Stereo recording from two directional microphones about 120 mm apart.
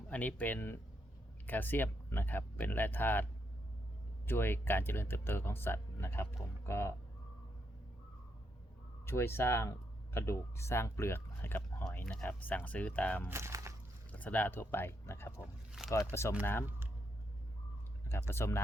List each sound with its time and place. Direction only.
0.1 s speech: 15° left (ahead or behind)
4.3 s speech: 20° left (ahead or behind)
9.0 s speech: 20° left (ahead or behind)
13.2 s speech: 20° right (ahead or behind)
14.1 s speech: 15° left (ahead or behind)
15.4 s speech: 5° right (ahead or behind)
16.4 s speech: 20° left (ahead or behind)
18.1 s speech: 20° left (ahead or behind)